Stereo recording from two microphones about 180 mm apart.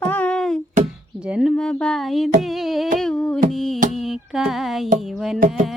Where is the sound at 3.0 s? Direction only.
5° left (ahead or behind).